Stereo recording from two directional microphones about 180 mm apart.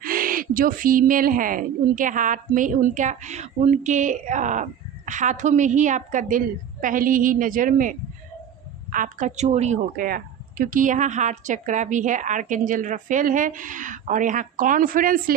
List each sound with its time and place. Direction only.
0.0 s speech: 50° right (ahead or behind)